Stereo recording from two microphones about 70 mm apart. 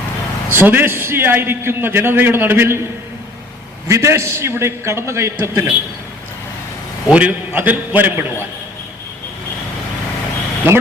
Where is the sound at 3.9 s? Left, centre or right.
Right.